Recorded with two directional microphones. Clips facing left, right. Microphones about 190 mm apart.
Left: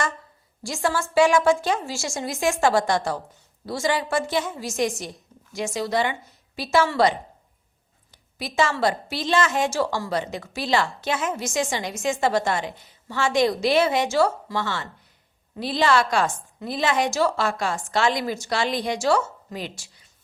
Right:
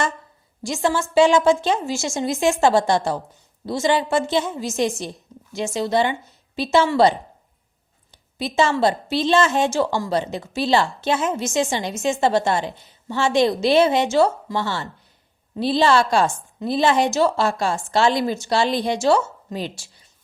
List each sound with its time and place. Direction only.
0.6 s speech: 20° right (ahead or behind)
8.1 s a sound: 25° right (ahead or behind)
8.8 s speech: 25° right (ahead or behind)